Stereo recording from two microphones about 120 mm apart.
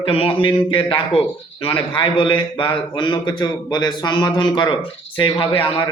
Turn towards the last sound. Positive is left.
turn(degrees=45)  # may be behind; listen again after turning